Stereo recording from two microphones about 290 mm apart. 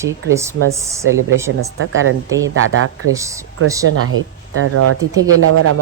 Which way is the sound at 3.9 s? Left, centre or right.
Right.